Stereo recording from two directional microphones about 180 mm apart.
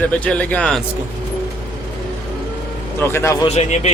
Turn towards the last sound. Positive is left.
turn(degrees=40)  # may be behind; listen again after turning